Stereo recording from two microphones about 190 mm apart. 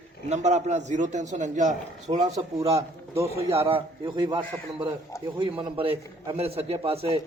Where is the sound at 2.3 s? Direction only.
20° right (ahead or behind).